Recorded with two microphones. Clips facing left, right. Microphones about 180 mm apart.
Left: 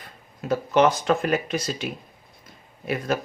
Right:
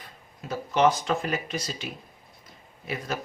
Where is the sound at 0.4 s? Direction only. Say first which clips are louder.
Left 3 dB; 60° left (ahead or behind).